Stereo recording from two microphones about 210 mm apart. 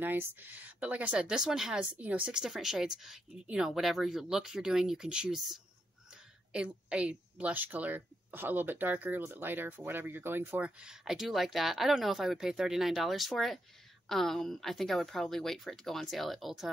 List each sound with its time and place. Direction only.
0.0 s a woman's voice: 10° right (ahead or behind)